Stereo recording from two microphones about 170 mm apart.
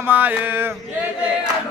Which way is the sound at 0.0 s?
10° right (ahead or behind).